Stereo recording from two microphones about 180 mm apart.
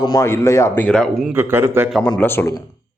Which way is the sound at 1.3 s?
10° right (ahead or behind).